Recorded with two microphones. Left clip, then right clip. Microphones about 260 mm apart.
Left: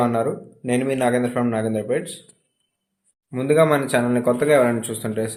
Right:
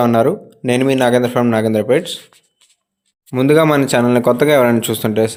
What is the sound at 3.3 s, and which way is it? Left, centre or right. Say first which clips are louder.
Speech: right 5 dB; right.